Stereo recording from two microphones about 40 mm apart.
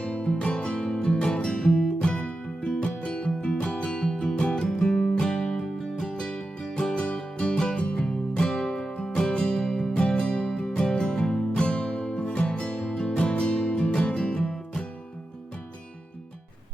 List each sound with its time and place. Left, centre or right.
0.0 s music: left